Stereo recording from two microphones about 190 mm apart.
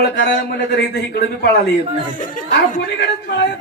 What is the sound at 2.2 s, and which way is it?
Speech, 45° left (ahead or behind).